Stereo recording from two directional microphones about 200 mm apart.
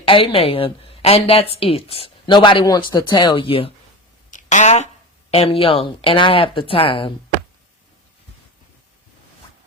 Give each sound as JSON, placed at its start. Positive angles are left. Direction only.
{"t": 0.0, "sound": "a woman's voice", "side_deg": 25}
{"t": 4.3, "sound": "a sound", "side_deg": 35}
{"t": 5.3, "sound": "speech", "side_deg": 30}